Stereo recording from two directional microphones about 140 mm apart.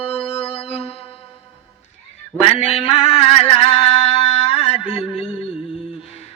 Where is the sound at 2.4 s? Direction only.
45° left (ahead or behind).